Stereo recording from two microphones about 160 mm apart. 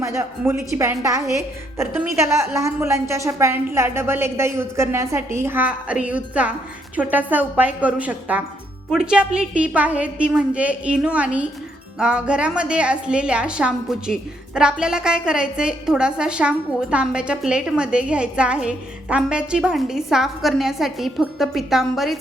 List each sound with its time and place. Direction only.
0.0 s a woman's voice: 20° right (ahead or behind); by 22.2 s centre (ahead or behind)